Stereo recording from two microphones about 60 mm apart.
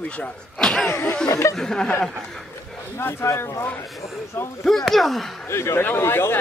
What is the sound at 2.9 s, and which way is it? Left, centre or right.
Speech, left.